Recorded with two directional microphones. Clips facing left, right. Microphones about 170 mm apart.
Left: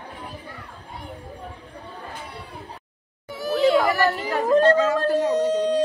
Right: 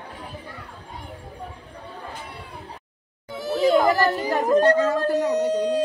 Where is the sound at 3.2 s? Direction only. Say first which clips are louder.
Left 1 dB; 25° right (ahead or behind).